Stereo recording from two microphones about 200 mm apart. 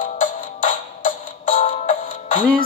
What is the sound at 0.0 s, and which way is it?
Music, 40° left (ahead or behind).